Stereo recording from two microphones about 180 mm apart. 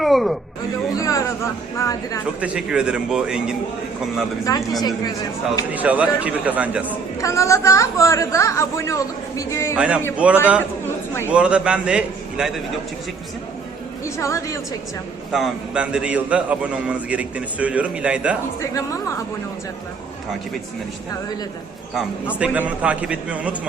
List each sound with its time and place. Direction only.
0.0 s a sound: centre (ahead or behind)
0.9 s a sound: 20° left (ahead or behind)
1.8 s a woman's voice: 20° left (ahead or behind)
2.4 s a man's voice: 5° right (ahead or behind)
4.8 s a woman's voice: 20° left (ahead or behind)
5.7 s a man's voice: 10° right (ahead or behind)
7.2 s a woman's voice: 15° left (ahead or behind)
9.7 s a man's voice: 5° right (ahead or behind)
14.0 s a woman's voice: 15° left (ahead or behind)
15.3 s a man's voice: 5° right (ahead or behind)
18.6 s a woman's voice: 15° left (ahead or behind)
22.4 s a man's voice: 5° right (ahead or behind)